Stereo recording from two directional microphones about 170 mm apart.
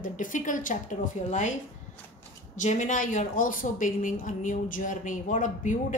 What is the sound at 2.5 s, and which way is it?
A woman's voice, 45° left (ahead or behind).